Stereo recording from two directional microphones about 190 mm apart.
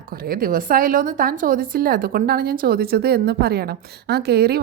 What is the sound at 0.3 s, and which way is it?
A woman's voice, 50° right (ahead or behind).